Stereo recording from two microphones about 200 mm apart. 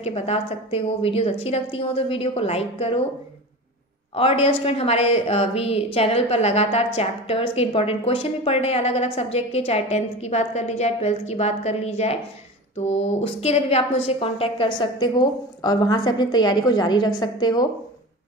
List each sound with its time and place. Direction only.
0.0 s a woman's voice: 30° left (ahead or behind)
4.1 s a woman's voice: 30° left (ahead or behind)